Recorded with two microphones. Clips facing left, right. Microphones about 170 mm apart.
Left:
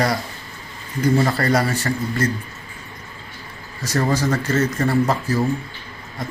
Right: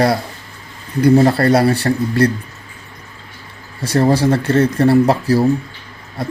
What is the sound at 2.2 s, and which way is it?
Speech, 65° right (ahead or behind).